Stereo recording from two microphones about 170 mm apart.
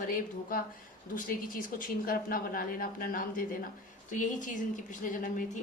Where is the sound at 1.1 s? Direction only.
55° left (ahead or behind).